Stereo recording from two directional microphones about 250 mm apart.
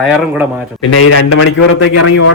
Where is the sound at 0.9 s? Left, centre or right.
Left.